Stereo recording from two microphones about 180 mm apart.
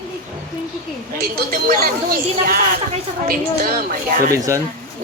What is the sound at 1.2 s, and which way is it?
A woman's voice, 55° right (ahead or behind).